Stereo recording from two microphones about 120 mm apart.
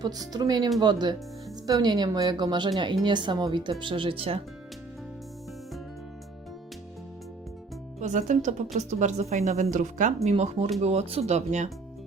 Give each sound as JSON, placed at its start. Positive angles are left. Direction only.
{"t": 0.0, "sound": "speech", "side_deg": -35}
{"t": 7.9, "sound": "speech", "side_deg": -90}
{"t": 9.7, "sound": "speech", "side_deg": -90}
{"t": 10.2, "sound": "speech", "side_deg": -65}